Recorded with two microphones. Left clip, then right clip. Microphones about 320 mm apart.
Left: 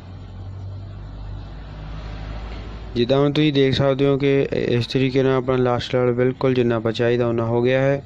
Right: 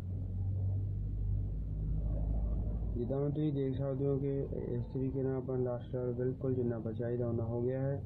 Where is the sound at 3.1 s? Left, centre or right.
Left.